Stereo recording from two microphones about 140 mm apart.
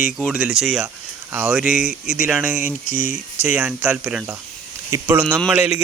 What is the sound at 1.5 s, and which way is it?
Speech, 5° right (ahead or behind).